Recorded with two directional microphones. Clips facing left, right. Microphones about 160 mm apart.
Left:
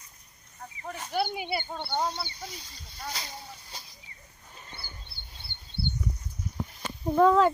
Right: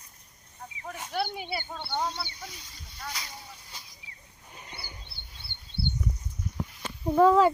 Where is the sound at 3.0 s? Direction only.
30° left (ahead or behind).